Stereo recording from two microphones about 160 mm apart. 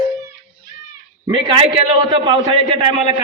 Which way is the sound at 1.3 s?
35° right (ahead or behind).